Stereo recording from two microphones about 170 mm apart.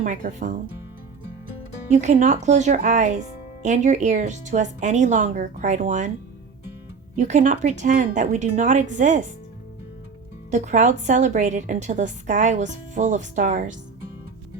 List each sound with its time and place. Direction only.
0.0 s a woman's voice: 50° right (ahead or behind)
1.9 s a woman's voice: 45° right (ahead or behind)
7.2 s a woman's voice: 45° right (ahead or behind)
10.5 s a woman's voice: 45° right (ahead or behind)